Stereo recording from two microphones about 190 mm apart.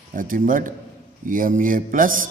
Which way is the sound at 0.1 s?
45° right (ahead or behind).